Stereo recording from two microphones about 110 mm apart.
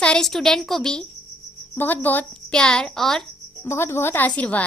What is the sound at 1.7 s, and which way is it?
A woman's voice, 15° left (ahead or behind).